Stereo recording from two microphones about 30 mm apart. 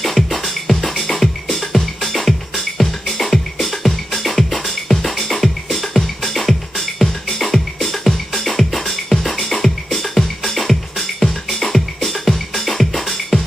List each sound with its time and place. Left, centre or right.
0.0 s music: centre